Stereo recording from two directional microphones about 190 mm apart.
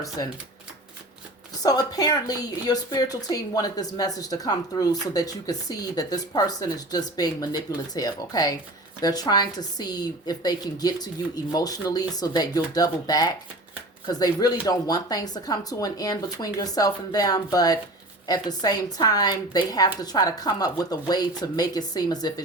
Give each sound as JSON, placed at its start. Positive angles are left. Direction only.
{"t": 1.6, "sound": "a woman's voice", "side_deg": 20}